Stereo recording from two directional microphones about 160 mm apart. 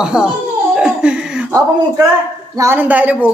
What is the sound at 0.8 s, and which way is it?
Laughter, 5° right (ahead or behind).